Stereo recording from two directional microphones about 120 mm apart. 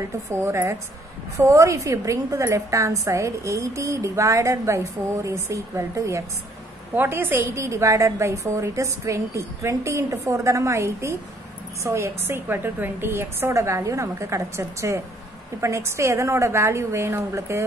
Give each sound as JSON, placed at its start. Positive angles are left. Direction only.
{"t": 0.3, "sound": "a woman's voice", "side_deg": -20}